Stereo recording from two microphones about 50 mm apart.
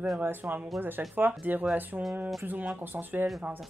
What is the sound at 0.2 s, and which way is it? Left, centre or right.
Speech, right.